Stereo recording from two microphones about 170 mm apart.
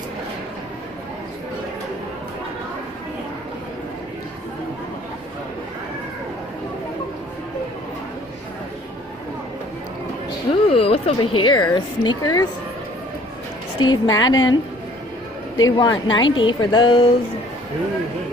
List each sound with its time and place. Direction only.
10.7 s speech: 35° left (ahead or behind)
13.7 s speech: 25° left (ahead or behind)